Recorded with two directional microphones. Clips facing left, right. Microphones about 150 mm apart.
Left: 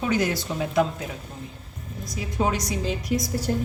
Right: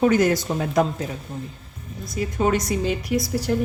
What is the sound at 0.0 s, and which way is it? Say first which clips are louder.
A woman's voice: right 6 dB; 50° right (ahead or behind).